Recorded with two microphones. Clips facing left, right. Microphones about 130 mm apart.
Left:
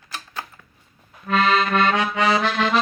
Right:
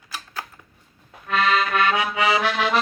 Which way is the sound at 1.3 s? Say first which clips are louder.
Left 2 dB; centre (ahead or behind).